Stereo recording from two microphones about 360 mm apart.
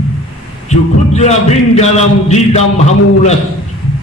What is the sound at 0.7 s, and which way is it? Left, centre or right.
Speech, centre.